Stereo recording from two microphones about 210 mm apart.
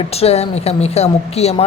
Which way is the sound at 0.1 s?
30° left (ahead or behind).